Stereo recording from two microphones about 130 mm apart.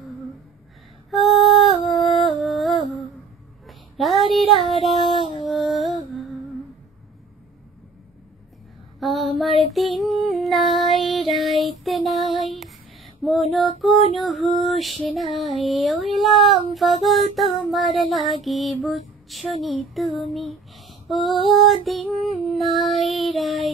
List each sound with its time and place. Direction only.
1.1 s music: centre (ahead or behind)
3.6 s a sound: centre (ahead or behind)
5.0 s a sound: 35° left (ahead or behind)
5.4 s music: centre (ahead or behind)
9.0 s child singing: centre (ahead or behind)
9.8 s music: centre (ahead or behind)
14.1 s child singing: centre (ahead or behind)
18.4 s music: centre (ahead or behind)
19.5 s child singing: centre (ahead or behind)